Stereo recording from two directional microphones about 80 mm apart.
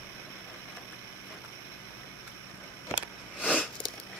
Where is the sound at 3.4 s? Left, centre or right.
Centre.